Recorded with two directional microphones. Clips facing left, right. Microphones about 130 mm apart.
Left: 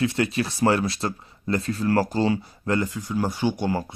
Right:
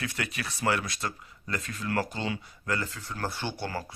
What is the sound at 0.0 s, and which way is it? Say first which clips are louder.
Speech: left 11 dB; 25° left (ahead or behind).